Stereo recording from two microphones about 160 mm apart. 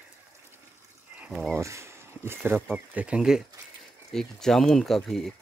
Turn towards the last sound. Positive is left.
turn(degrees=0)  # may be behind; listen again after turning